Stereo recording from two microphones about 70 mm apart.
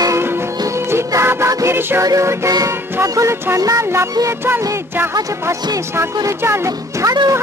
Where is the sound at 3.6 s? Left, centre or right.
Right.